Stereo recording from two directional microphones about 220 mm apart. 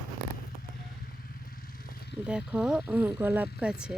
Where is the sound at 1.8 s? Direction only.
40° left (ahead or behind).